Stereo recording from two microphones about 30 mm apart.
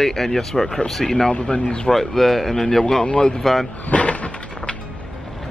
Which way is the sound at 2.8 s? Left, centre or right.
Left.